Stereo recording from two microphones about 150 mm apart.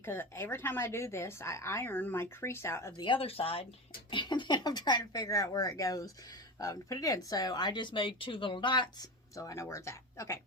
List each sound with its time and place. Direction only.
0.0 s speech: 15° left (ahead or behind)
3.0 s speech: 35° left (ahead or behind); by 10.4 s 20° left (ahead or behind)